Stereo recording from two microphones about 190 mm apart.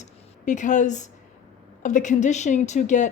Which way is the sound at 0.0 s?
40° left (ahead or behind).